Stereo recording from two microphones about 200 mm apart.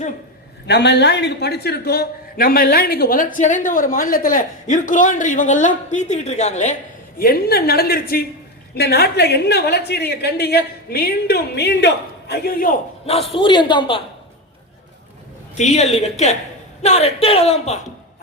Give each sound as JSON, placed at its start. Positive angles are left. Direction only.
{"t": 0.7, "sound": "a woman's voice", "side_deg": 60}
{"t": 7.2, "sound": "a woman's voice", "side_deg": 50}
{"t": 13.1, "sound": "a man's voice", "side_deg": 30}
{"t": 15.5, "sound": "a man's voice", "side_deg": 35}